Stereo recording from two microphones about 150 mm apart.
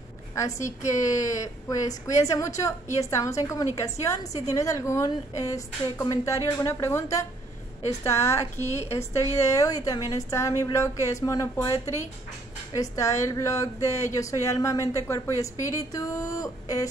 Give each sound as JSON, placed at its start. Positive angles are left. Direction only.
{"t": 0.3, "sound": "a woman's voice", "side_deg": 20}